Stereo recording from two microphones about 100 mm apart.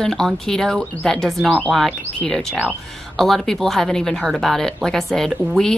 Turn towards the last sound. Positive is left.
turn(degrees=-5)  # may be behind; listen again after turning